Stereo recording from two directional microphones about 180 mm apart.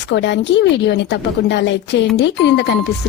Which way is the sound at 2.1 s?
75° left (ahead or behind).